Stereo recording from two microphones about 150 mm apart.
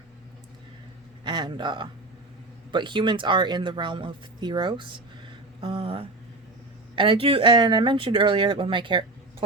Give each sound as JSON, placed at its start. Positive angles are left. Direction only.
{"t": 1.2, "sound": "speech", "side_deg": -30}